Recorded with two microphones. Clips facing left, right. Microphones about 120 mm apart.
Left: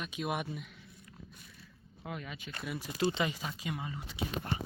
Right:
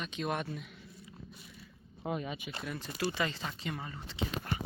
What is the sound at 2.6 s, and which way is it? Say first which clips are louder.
Speech: left 3 dB; 10° left (ahead or behind).